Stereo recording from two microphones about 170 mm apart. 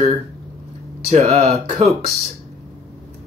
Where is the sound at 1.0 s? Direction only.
40° right (ahead or behind).